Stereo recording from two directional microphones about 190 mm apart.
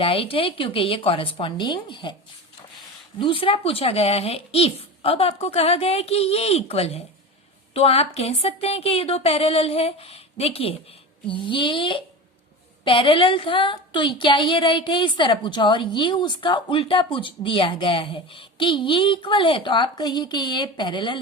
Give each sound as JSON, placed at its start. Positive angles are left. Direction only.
{"t": 0.0, "sound": "a woman's voice", "side_deg": 30}
{"t": 3.2, "sound": "a woman's voice", "side_deg": 30}